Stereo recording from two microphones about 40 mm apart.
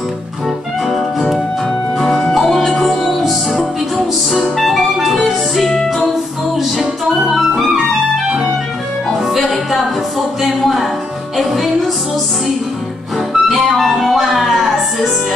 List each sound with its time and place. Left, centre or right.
2.0 s music: centre
2.6 s music: centre
9.2 s music: centre
13.3 s music: centre